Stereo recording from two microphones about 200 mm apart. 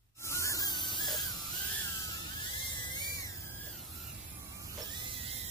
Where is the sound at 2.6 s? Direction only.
20° left (ahead or behind).